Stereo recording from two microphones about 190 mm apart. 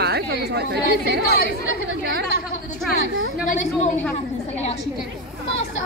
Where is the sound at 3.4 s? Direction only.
40° left (ahead or behind).